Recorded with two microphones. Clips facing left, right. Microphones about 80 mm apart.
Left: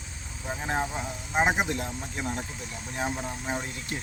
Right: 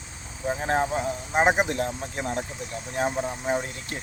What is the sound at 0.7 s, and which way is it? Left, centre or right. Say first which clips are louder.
Speech: right 5 dB; right.